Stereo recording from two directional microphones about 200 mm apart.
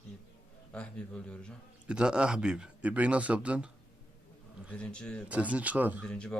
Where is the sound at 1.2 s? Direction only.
5° left (ahead or behind).